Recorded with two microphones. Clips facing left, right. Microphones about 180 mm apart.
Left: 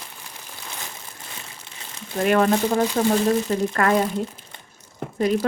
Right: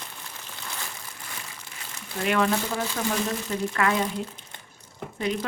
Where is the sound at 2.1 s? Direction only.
40° left (ahead or behind).